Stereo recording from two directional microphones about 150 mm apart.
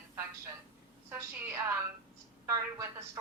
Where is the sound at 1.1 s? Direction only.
15° right (ahead or behind).